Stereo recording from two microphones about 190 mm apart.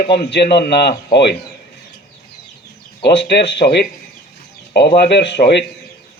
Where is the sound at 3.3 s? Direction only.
65° left (ahead or behind).